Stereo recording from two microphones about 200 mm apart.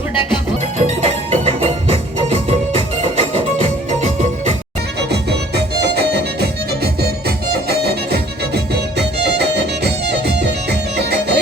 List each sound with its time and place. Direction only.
0.8 s music: 35° right (ahead or behind)
5.0 s music: 55° right (ahead or behind)